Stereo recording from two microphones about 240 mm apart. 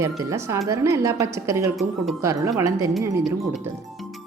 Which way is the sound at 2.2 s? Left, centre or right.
Centre.